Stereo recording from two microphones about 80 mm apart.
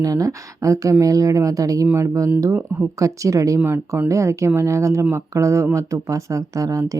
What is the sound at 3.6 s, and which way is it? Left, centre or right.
Speech, right.